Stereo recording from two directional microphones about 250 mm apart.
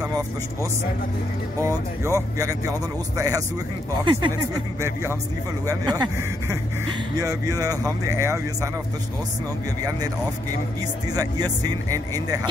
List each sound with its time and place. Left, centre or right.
1.6 s speech: centre
5.7 s speech: centre
7.2 s speech: centre
11.1 s speech: centre